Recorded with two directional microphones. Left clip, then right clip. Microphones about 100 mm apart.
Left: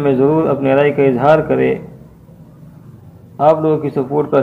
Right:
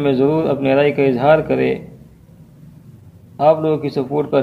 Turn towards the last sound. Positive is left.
turn(degrees=-5)  # may be behind; listen again after turning